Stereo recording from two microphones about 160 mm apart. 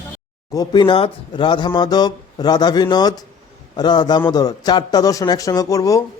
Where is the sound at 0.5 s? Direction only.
25° left (ahead or behind).